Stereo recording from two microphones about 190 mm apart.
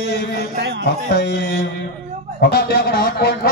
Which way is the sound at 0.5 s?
65° right (ahead or behind).